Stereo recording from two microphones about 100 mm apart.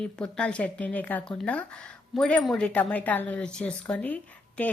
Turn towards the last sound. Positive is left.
turn(degrees=15)  # may be behind; listen again after turning